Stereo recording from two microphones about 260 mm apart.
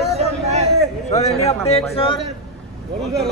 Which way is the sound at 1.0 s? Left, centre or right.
Left.